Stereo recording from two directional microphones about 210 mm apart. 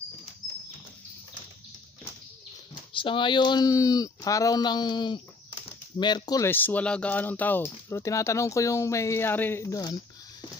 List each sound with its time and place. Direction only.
2.7 s speech: 25° left (ahead or behind)